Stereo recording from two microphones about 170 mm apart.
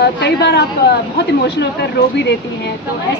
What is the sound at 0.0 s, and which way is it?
Speech, 75° left (ahead or behind).